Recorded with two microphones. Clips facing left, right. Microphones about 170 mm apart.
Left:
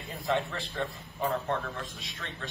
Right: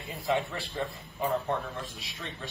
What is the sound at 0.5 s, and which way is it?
A man's voice, 10° right (ahead or behind).